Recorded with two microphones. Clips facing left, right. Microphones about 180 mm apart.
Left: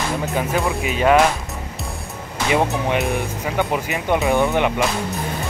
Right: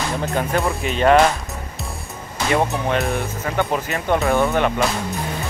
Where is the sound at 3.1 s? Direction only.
15° left (ahead or behind).